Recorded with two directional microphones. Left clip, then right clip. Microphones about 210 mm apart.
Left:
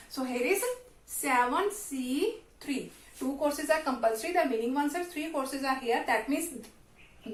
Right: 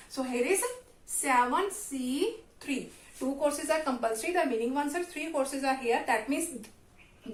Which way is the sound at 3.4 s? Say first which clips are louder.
Left 1 dB; 30° right (ahead or behind).